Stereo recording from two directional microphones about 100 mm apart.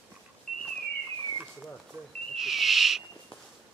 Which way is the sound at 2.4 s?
5° right (ahead or behind).